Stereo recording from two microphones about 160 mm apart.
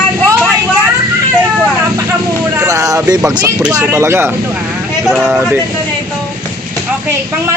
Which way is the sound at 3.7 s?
15° right (ahead or behind).